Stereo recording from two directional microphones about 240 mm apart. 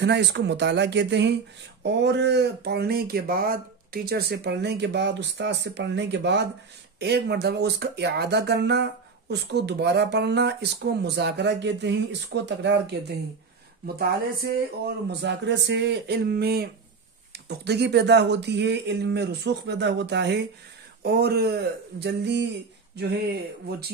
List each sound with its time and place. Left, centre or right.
0.0 s speech: right